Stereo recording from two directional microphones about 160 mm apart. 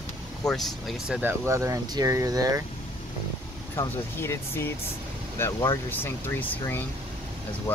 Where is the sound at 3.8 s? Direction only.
15° left (ahead or behind).